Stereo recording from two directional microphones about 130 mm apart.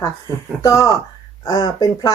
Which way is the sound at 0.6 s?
25° left (ahead or behind).